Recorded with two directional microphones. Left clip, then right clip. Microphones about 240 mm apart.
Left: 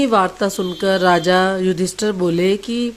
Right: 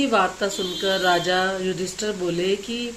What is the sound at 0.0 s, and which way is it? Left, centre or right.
Speech, left.